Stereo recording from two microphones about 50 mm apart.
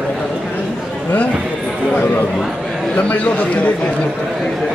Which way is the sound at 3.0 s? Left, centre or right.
Left.